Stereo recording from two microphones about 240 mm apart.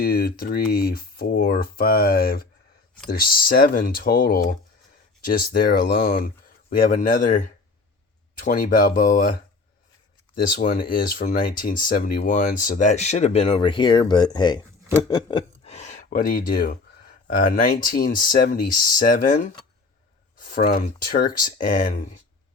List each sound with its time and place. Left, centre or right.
0.0 s speech: left
10.3 s speech: left
20.4 s speech: left